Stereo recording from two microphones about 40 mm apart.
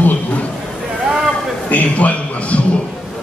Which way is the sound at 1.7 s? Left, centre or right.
Left.